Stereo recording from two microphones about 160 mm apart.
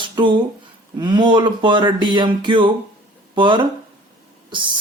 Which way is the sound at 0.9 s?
30° right (ahead or behind).